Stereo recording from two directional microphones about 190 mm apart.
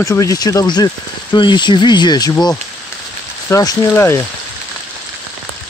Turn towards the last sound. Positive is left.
turn(degrees=15)  # may be behind; listen again after turning